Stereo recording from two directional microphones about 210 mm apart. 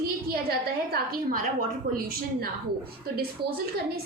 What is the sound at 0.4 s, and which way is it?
Speech, 45° right (ahead or behind).